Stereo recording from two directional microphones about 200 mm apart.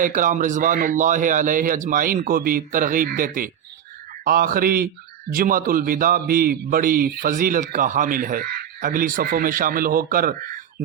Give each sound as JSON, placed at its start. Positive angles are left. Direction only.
{"t": 0.0, "sound": "a man's voice", "side_deg": -40}